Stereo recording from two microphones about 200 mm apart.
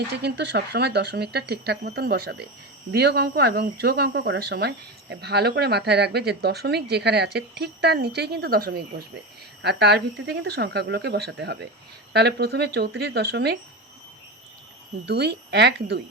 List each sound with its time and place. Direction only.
0.1 s speech: 55° right (ahead or behind)
15.0 s speech: 55° right (ahead or behind)